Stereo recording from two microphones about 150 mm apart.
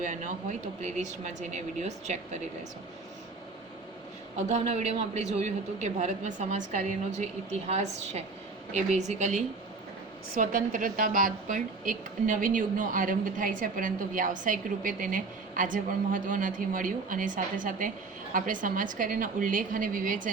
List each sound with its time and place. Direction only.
0.0 s a woman's voice: 55° right (ahead or behind)
4.4 s a woman's voice: 50° right (ahead or behind)
10.3 s a woman's voice: 60° right (ahead or behind)